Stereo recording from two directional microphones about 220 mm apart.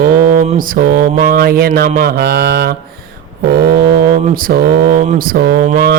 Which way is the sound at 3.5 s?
45° right (ahead or behind).